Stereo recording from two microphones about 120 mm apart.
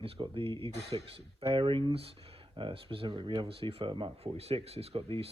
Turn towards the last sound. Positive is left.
turn(degrees=-55)  # may be behind; listen again after turning